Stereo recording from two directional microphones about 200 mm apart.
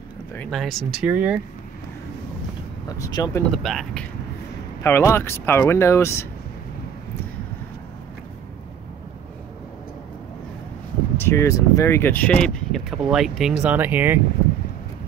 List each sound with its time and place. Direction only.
0.3 s speech: 5° left (ahead or behind)
2.9 s speech: 20° left (ahead or behind)
3.5 s speech: centre (ahead or behind)
11.1 s speech: 15° left (ahead or behind); by 14.2 s 10° right (ahead or behind)